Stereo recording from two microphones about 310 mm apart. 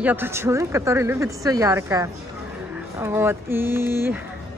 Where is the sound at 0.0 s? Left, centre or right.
Centre.